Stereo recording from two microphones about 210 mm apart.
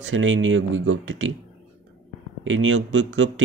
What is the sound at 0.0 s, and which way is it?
Speech, 65° right (ahead or behind).